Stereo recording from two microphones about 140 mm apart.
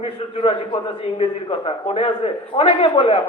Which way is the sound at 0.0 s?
40° left (ahead or behind).